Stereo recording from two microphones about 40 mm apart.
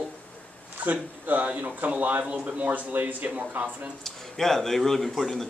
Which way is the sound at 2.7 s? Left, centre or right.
Right.